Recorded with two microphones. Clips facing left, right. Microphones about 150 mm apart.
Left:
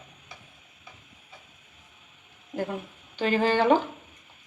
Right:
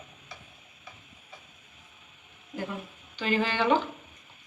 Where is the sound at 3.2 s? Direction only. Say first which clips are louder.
Left 4 dB; 45° left (ahead or behind).